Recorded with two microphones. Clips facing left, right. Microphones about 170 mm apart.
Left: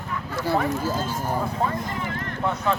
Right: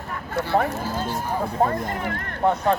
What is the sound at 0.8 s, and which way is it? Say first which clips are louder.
Speech: left 1 dB; 45° left (ahead or behind).